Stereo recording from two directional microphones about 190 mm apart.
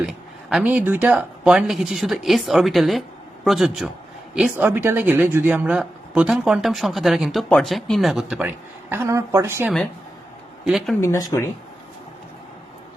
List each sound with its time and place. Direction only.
0.5 s speech: 5° right (ahead or behind)
10.7 s speech: centre (ahead or behind)
11.0 s speech: 15° left (ahead or behind)